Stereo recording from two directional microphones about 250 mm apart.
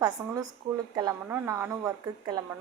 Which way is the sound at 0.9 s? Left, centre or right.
Centre.